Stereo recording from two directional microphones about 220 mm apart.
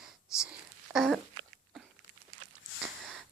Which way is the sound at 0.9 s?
Centre (ahead or behind).